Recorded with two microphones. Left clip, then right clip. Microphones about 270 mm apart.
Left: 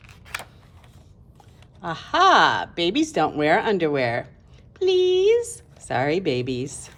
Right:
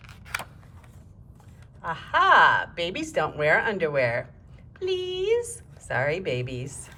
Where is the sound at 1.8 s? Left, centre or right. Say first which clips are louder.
Left 3 dB; centre.